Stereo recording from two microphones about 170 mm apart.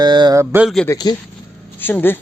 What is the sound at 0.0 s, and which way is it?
Speech, 25° right (ahead or behind).